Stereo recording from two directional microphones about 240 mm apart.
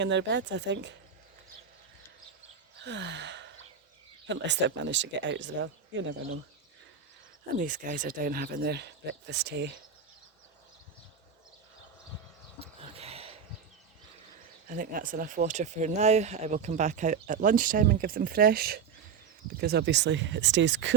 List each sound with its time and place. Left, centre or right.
0.0 s speech: right
2.8 s gasp: right
4.3 s speech: right
7.5 s speech: right
12.5 s a sound: right
14.7 s speech: right